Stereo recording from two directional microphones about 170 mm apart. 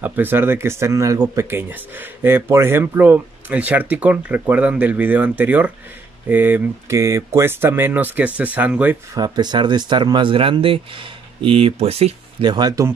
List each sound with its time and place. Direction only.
0.0 s speech: 10° right (ahead or behind)
9.1 s speech: 25° right (ahead or behind)